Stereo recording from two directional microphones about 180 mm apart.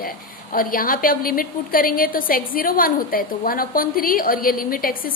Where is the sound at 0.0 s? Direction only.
50° left (ahead or behind).